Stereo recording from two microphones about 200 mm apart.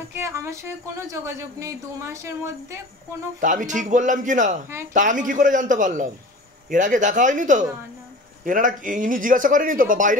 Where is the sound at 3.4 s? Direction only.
40° right (ahead or behind).